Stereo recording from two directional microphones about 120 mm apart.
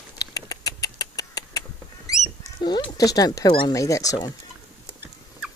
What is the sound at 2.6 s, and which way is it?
Speech, 35° left (ahead or behind).